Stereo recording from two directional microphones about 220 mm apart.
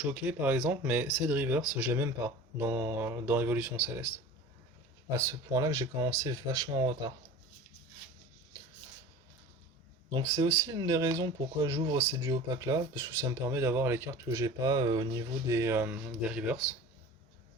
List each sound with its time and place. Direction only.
0.1 s speech: 10° right (ahead or behind)
5.1 s speech: 15° right (ahead or behind)
10.1 s speech: 20° right (ahead or behind)